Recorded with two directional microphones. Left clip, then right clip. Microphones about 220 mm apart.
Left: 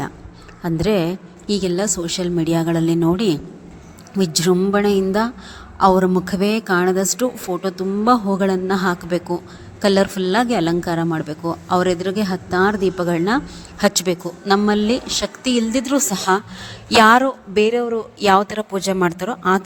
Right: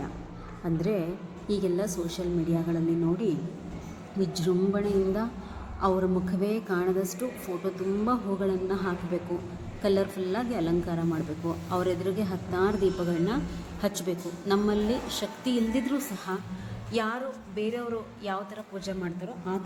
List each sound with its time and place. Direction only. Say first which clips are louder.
0.6 s a woman's voice: left 11 dB; 45° left (ahead or behind)
18.2 s a woman's voice: left 19 dB; 50° left (ahead or behind)